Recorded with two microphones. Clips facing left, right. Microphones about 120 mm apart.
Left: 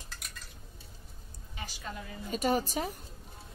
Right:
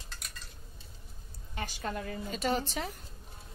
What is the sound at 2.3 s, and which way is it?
Speech, 10° left (ahead or behind).